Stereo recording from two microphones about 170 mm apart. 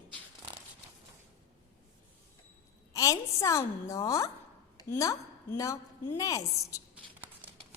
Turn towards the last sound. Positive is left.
turn(degrees=20)  # may be behind; listen again after turning